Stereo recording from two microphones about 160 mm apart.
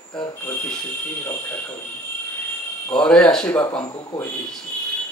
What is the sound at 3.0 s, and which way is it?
Speech, 5° left (ahead or behind).